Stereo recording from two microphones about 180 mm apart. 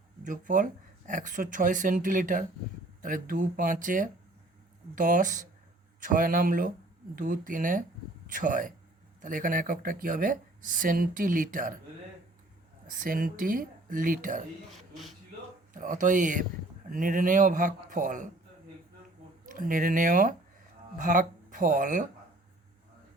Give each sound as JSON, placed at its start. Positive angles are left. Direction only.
{"t": 0.3, "sound": "speech", "side_deg": -45}
{"t": 13.0, "sound": "speech", "side_deg": -50}
{"t": 14.7, "sound": "speech", "side_deg": 0}
{"t": 15.7, "sound": "speech", "side_deg": -45}
{"t": 19.5, "sound": "speech", "side_deg": -50}